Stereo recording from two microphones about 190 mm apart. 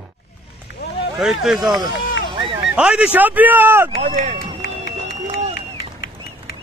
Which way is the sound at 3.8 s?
35° right (ahead or behind).